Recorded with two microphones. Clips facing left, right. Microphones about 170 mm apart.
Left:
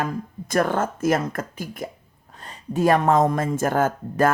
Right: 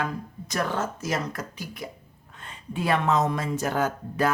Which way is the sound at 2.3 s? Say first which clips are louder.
Left 7 dB; 40° left (ahead or behind).